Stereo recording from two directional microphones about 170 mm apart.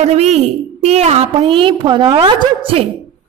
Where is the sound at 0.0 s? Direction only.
40° right (ahead or behind).